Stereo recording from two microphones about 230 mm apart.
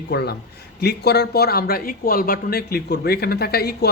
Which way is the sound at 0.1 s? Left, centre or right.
Left.